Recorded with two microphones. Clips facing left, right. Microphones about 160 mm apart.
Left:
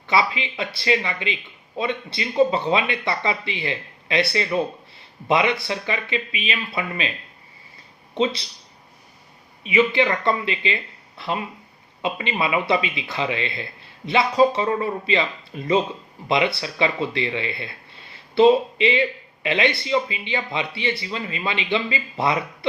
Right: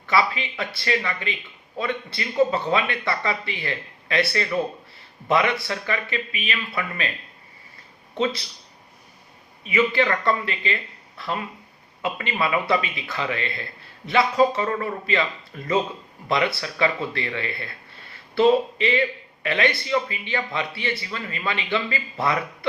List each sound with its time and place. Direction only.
0.1 s a man's voice: 20° left (ahead or behind)
9.6 s a man's voice: 20° left (ahead or behind)
12.0 s a man's voice: 20° left (ahead or behind)